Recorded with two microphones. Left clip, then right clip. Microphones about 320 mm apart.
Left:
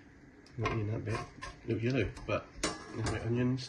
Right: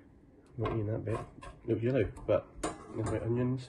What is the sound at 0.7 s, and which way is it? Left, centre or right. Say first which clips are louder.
Speech: right 1 dB; centre.